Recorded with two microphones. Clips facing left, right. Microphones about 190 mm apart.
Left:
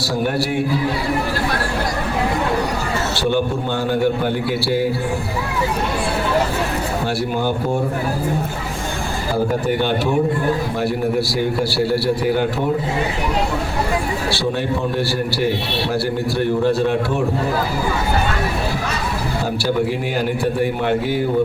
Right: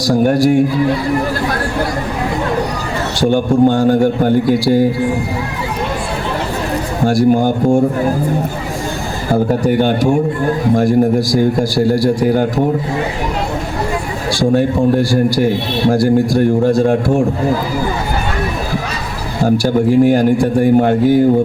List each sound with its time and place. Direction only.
0.0 s a man's voice: 45° right (ahead or behind)
3.2 s a man's voice: 45° right (ahead or behind)
7.0 s a man's voice: 45° right (ahead or behind)
9.3 s a man's voice: 45° right (ahead or behind)
14.3 s a man's voice: 45° right (ahead or behind)
19.5 s a man's voice: 45° right (ahead or behind)